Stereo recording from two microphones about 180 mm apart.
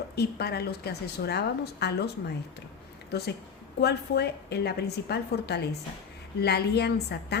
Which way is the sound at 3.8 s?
65° left (ahead or behind).